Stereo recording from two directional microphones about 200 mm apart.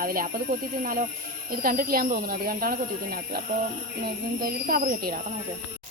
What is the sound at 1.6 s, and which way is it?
A woman's voice, 45° right (ahead or behind).